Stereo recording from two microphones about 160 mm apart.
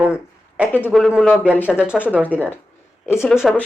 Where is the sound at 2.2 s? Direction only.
10° left (ahead or behind).